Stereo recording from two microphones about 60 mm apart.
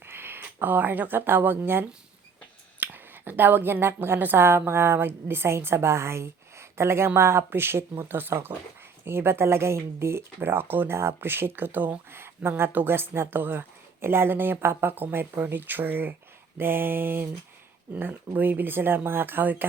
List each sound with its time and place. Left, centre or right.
0.0 s speech: right
2.8 s a woman's voice: right